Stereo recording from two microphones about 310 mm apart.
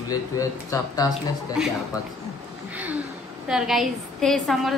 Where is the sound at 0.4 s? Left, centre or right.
Centre.